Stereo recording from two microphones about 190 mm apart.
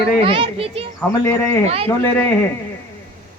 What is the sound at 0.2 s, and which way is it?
Speech, 30° right (ahead or behind).